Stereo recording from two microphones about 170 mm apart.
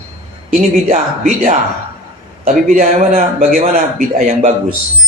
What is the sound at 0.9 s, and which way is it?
A man's voice, 50° right (ahead or behind).